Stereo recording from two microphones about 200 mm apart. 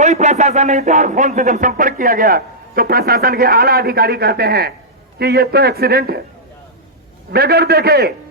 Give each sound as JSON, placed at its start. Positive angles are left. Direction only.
{"t": 0.0, "sound": "speech", "side_deg": -35}
{"t": 7.3, "sound": "speech", "side_deg": -50}